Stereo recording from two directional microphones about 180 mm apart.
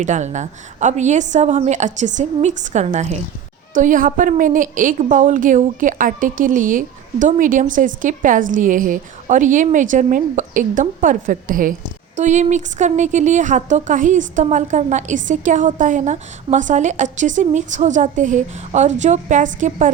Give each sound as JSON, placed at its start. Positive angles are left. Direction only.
{"t": 0.0, "sound": "a woman's voice", "side_deg": -40}